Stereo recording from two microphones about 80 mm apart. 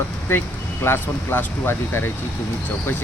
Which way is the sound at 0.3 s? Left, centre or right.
Left.